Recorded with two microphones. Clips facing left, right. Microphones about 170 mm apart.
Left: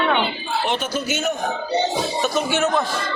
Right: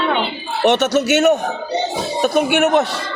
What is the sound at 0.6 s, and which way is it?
Speech, 75° right (ahead or behind).